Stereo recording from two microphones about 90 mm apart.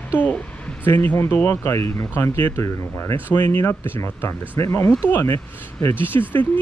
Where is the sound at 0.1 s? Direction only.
20° left (ahead or behind).